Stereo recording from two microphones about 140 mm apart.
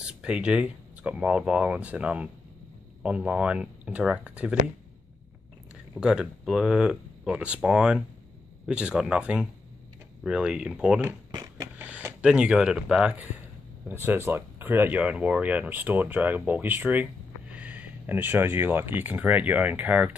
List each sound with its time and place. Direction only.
0.0 s speech: 5° right (ahead or behind)
5.9 s speech: 5° right (ahead or behind)
11.3 s a sound: 25° right (ahead or behind)
11.8 s speech: 10° right (ahead or behind)